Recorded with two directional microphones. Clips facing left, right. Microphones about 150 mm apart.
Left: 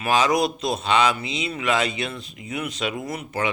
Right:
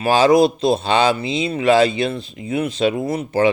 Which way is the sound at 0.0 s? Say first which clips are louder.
Right 7 dB; 30° right (ahead or behind).